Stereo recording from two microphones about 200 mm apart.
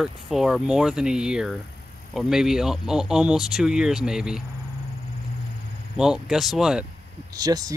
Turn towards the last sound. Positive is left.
turn(degrees=-20)  # may be behind; listen again after turning